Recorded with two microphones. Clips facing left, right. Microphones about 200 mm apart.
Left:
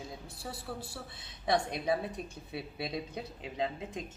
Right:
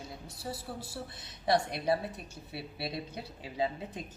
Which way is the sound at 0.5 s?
20° right (ahead or behind).